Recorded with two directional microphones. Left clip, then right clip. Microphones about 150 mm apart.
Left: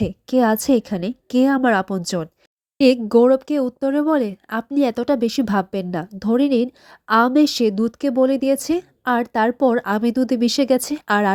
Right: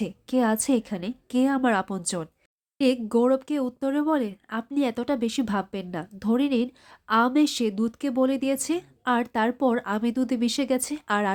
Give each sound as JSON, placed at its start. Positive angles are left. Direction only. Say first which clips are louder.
{"t": 0.0, "sound": "speech", "louder": "left 7 dB", "side_deg": 40}
{"t": 2.7, "sound": "speech", "louder": "left 9 dB", "side_deg": 45}